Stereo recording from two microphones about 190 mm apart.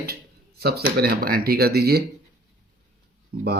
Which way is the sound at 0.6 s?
55° right (ahead or behind).